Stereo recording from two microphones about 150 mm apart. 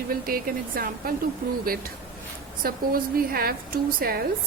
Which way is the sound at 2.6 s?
75° right (ahead or behind).